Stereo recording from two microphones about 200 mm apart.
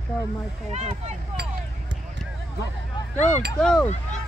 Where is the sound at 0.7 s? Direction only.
35° right (ahead or behind).